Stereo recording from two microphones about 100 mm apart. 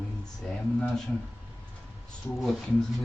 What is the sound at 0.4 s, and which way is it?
Speech, 10° left (ahead or behind).